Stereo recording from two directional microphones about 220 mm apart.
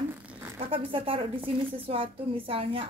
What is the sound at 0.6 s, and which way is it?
A woman's voice, 25° right (ahead or behind).